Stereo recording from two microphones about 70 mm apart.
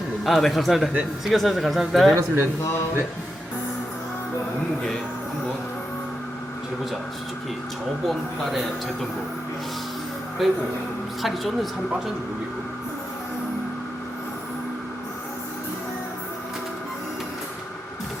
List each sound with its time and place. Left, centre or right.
0.3 s speech: centre
2.1 s speech: right
8.0 s speech: centre
10.4 s speech: centre